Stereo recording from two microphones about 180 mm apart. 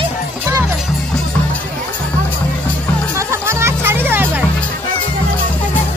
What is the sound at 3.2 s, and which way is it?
Music, 15° right (ahead or behind).